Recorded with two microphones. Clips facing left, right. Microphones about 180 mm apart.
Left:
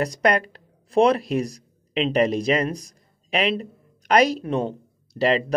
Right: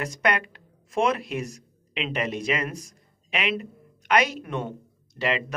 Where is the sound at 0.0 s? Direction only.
35° left (ahead or behind).